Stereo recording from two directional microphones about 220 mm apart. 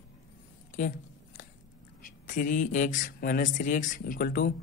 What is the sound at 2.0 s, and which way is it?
Speech, 35° left (ahead or behind).